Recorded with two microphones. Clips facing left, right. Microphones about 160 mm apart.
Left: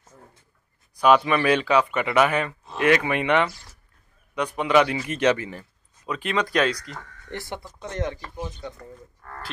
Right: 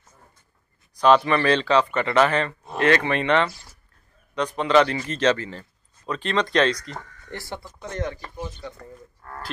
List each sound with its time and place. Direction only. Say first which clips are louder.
0.9 s speech: right 1 dB; 10° left (ahead or behind)
7.2 s speech: left 2 dB; 20° left (ahead or behind)